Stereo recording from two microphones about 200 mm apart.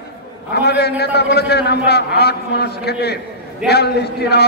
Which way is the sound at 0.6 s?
55° left (ahead or behind).